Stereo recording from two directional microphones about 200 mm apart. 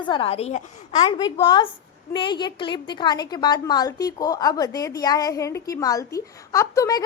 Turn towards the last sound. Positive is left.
turn(degrees=15)  # may be behind; listen again after turning